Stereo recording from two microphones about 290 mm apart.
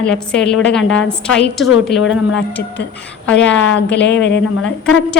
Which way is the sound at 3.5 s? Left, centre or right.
Left.